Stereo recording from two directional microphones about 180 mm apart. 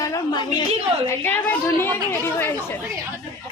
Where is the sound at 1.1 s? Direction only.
10° left (ahead or behind).